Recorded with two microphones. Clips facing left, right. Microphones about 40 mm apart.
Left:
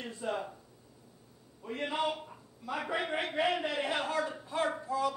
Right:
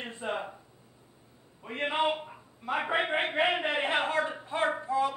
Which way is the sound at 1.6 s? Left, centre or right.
Right.